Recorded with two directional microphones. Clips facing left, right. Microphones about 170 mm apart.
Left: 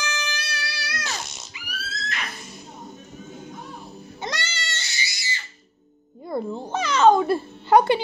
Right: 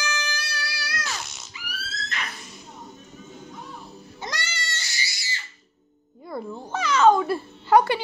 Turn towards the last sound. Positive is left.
turn(degrees=20)  # may be behind; listen again after turning